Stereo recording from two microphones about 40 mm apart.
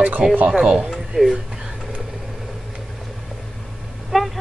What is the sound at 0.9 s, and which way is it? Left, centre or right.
Speech, centre.